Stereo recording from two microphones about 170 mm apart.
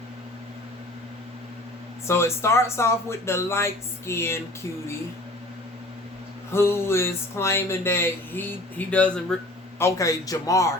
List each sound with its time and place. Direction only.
2.0 s speech: 15° left (ahead or behind)
6.5 s a man's voice: 15° left (ahead or behind)